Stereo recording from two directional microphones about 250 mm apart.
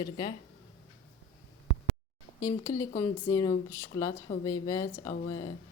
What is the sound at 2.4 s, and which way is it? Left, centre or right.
A woman's voice, centre.